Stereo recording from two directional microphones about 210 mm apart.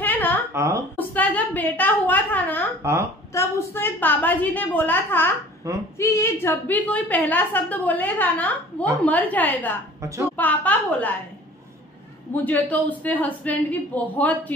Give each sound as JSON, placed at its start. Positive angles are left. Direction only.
{"t": 0.0, "sound": "a sound", "side_deg": 10}
{"t": 0.5, "sound": "a woman's voice", "side_deg": -15}
{"t": 0.9, "sound": "a woman's voice", "side_deg": 5}
{"t": 2.8, "sound": "a woman's voice", "side_deg": -10}
{"t": 3.3, "sound": "a woman's voice", "side_deg": 10}
{"t": 5.6, "sound": "a woman's voice", "side_deg": -15}
{"t": 5.9, "sound": "a woman's voice", "side_deg": 15}
{"t": 12.3, "sound": "a woman's voice", "side_deg": 10}